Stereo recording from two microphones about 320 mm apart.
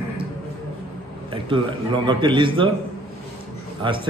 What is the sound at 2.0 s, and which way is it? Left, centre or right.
Speech, centre.